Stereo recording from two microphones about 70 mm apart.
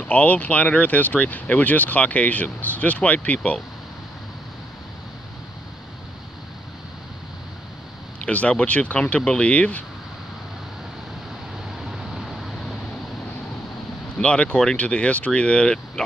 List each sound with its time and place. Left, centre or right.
0.0 s speech: left
8.3 s speech: centre
11.8 s vehicle: centre
14.1 s speech: centre